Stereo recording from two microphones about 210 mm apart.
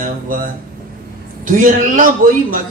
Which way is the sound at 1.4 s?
40° right (ahead or behind).